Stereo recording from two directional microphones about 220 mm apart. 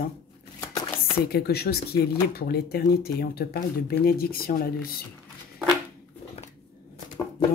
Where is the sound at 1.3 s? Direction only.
45° left (ahead or behind).